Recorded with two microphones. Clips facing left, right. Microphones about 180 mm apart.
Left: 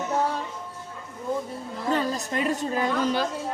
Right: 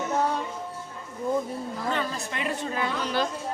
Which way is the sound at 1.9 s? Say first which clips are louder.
Left 6 dB; 40° left (ahead or behind).